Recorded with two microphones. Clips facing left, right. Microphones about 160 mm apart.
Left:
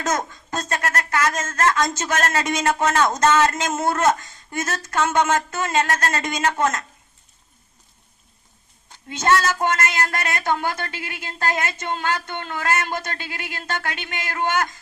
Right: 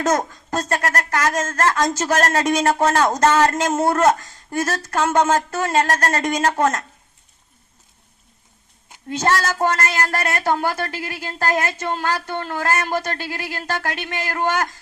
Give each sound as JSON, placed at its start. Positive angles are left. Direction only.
{"t": 0.0, "sound": "speech", "side_deg": -35}
{"t": 9.0, "sound": "speech", "side_deg": -35}